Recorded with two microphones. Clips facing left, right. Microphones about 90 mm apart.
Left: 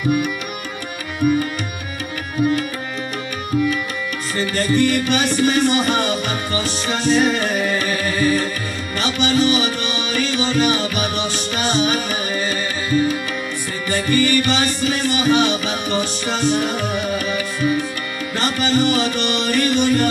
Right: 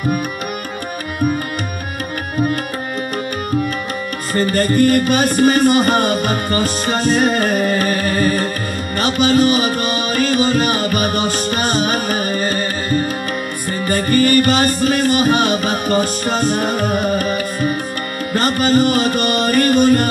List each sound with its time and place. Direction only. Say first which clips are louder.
4.4 s music: right 4 dB; 45° right (ahead or behind)